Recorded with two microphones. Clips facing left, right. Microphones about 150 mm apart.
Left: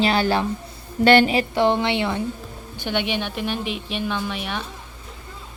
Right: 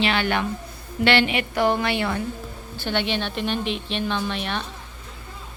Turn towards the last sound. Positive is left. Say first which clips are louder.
# right 1 dB
turn(degrees=10)  # may be behind; listen again after turning